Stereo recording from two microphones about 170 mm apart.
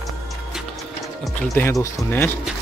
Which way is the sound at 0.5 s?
Centre (ahead or behind).